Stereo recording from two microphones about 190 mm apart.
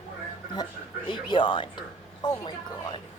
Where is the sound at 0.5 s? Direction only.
25° left (ahead or behind).